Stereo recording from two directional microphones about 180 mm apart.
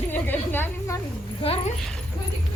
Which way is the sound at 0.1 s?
10° left (ahead or behind).